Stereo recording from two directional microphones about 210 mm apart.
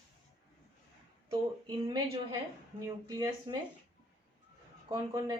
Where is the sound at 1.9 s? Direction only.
20° right (ahead or behind).